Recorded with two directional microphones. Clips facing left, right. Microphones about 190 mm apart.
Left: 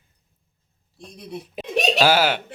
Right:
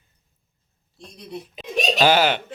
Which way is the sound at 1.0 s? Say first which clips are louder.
Left 1 dB; 5° left (ahead or behind).